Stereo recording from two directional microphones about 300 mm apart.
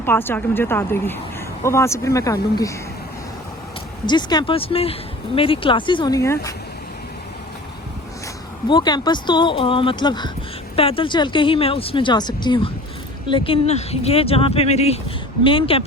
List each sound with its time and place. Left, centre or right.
0.0 s speech: centre
4.0 s speech: centre
8.7 s speech: centre